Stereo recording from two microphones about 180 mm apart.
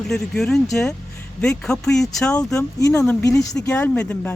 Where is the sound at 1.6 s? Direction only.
5° left (ahead or behind).